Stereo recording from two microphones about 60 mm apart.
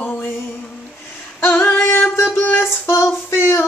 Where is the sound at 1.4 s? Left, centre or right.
Left.